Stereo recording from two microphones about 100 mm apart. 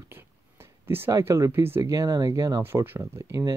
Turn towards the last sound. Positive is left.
turn(degrees=-35)  # may be behind; listen again after turning